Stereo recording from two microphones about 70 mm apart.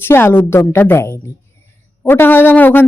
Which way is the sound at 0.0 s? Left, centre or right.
Left.